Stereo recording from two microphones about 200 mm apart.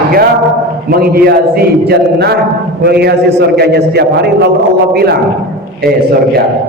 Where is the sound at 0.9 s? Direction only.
50° right (ahead or behind).